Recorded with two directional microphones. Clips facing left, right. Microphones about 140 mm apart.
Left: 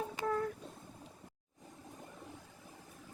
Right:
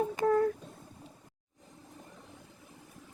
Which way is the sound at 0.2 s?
45° right (ahead or behind).